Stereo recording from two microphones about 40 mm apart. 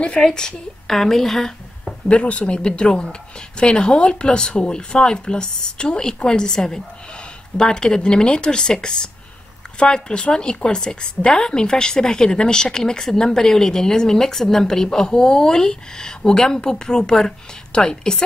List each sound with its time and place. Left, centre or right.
0.2 s speech: centre
2.0 s a woman's voice: left